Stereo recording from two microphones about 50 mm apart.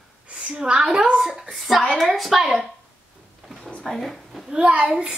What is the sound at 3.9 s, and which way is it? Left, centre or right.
Speech, centre.